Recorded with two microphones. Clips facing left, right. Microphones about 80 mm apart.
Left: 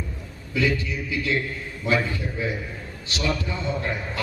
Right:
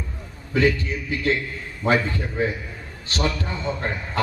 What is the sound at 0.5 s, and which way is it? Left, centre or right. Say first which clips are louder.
A man's voice: right 4 dB; right.